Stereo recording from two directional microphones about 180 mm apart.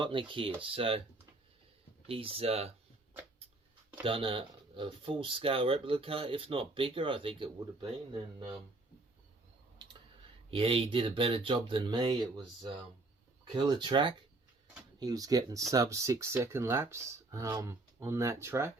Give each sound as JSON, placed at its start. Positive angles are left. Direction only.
{"t": 0.0, "sound": "speech", "side_deg": -30}
{"t": 2.0, "sound": "speech", "side_deg": -30}
{"t": 4.0, "sound": "speech", "side_deg": -30}
{"t": 9.8, "sound": "tick", "side_deg": -25}
{"t": 10.5, "sound": "speech", "side_deg": -30}
{"t": 13.7, "sound": "speech", "side_deg": -25}